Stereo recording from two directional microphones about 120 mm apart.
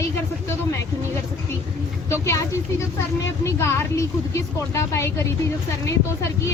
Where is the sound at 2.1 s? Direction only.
25° left (ahead or behind).